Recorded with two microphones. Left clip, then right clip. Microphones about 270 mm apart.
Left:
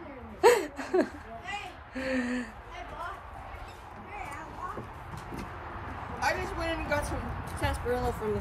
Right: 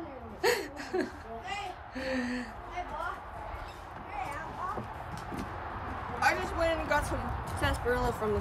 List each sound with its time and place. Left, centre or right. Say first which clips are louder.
0.4 s a sound: left 7 dB; centre
2.0 s a woman's voice: left 3 dB; centre
6.1 s a woman's voice: right 2 dB; centre